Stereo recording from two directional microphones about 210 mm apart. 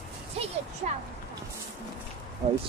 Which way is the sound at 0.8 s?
35° right (ahead or behind).